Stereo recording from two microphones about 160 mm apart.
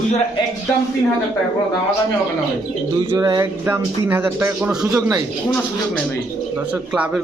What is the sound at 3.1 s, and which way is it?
A man's voice, 25° right (ahead or behind).